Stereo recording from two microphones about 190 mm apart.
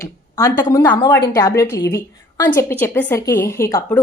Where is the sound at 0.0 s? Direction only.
20° left (ahead or behind).